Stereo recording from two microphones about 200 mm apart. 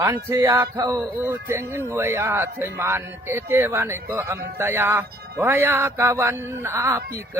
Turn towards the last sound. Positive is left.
turn(degrees=-15)  # may be behind; listen again after turning